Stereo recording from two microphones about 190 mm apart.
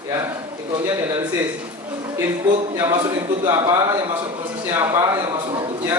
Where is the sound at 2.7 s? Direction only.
20° right (ahead or behind).